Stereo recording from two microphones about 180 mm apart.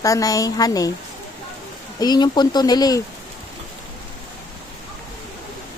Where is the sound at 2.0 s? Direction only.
20° left (ahead or behind).